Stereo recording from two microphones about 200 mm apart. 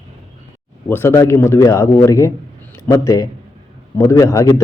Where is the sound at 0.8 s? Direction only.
10° left (ahead or behind).